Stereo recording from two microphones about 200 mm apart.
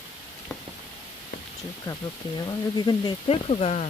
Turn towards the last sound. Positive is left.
turn(degrees=30)  # may be behind; listen again after turning